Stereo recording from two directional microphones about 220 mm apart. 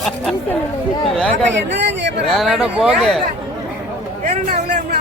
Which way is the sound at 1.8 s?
55° right (ahead or behind).